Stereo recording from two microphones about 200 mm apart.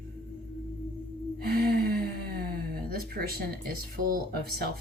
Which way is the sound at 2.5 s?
50° right (ahead or behind).